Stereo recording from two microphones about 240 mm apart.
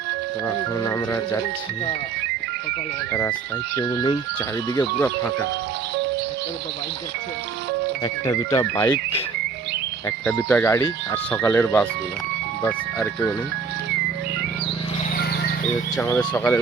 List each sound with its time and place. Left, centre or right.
0.4 s speech: centre
3.1 s speech: centre
4.9 s speech: centre
8.0 s speech: centre
10.1 s speech: centre
15.1 s a sound: left
16.0 s speech: centre